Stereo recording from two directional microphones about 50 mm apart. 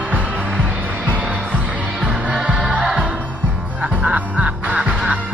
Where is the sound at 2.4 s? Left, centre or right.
Centre.